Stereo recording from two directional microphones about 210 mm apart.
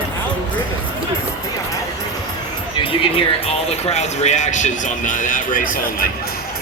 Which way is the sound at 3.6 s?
30° left (ahead or behind).